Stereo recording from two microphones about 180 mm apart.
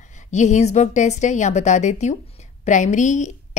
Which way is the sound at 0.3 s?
40° left (ahead or behind).